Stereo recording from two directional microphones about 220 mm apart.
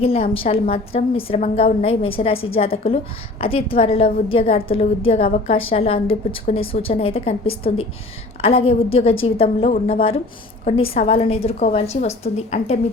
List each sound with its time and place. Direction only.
0.0 s a woman's voice: 25° left (ahead or behind)